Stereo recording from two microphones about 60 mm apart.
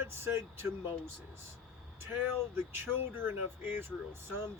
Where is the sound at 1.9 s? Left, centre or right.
Right.